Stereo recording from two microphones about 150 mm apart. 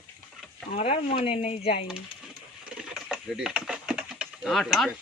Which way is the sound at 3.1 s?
5° right (ahead or behind).